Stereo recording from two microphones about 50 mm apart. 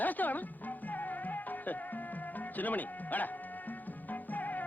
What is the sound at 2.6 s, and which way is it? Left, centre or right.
Speech, left.